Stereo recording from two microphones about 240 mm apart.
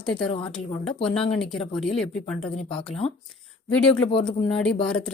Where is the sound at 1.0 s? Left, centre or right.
Centre.